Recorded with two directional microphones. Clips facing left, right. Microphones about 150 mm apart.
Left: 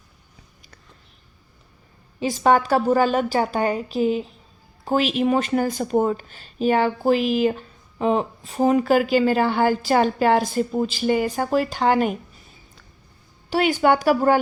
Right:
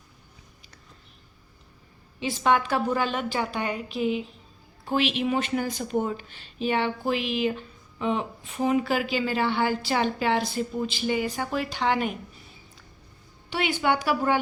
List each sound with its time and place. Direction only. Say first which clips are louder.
2.2 s a woman's voice: left 5 dB; 40° left (ahead or behind)
13.5 s speech: left 7 dB; 40° left (ahead or behind)